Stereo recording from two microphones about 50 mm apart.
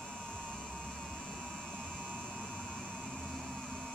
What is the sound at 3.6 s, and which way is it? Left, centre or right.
Music, centre.